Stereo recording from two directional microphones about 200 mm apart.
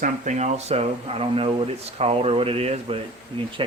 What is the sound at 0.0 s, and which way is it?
Speech, 35° right (ahead or behind).